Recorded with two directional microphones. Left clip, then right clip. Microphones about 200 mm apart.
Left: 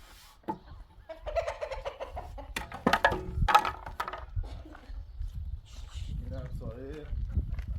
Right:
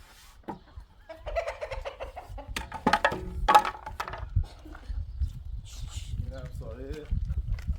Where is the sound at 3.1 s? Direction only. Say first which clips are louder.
Right 3 dB; 10° left (ahead or behind).